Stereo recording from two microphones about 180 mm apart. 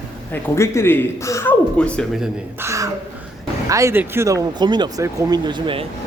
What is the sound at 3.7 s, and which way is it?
Speech, 15° right (ahead or behind).